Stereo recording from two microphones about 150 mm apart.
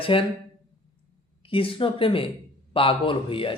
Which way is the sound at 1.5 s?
35° left (ahead or behind).